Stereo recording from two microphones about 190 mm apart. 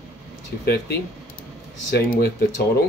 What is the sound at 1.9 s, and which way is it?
Speech, 55° left (ahead or behind).